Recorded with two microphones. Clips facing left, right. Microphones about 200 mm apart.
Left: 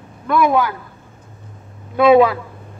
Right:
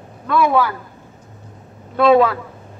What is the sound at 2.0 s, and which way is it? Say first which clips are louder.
Speech: left 2 dB; 10° left (ahead or behind).